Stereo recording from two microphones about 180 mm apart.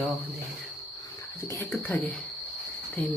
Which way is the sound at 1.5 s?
15° left (ahead or behind).